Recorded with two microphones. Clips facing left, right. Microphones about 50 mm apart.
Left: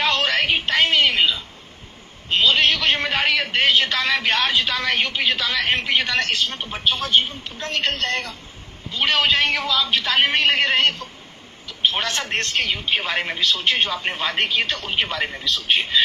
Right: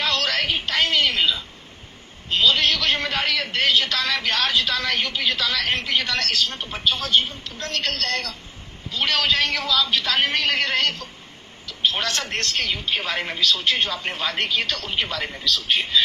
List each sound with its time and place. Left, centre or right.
0.0 s music: left
2.5 s a man's voice: left